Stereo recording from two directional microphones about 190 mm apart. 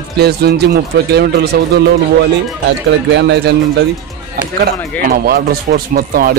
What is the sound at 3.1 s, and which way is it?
Speech, 65° right (ahead or behind).